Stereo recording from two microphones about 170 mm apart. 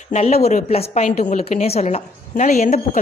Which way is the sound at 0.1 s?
40° left (ahead or behind).